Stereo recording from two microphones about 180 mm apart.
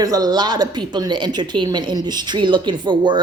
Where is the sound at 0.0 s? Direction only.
20° right (ahead or behind).